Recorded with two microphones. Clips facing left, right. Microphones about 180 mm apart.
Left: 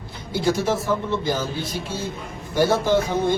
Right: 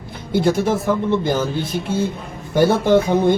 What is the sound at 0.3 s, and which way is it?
Speech, 55° right (ahead or behind).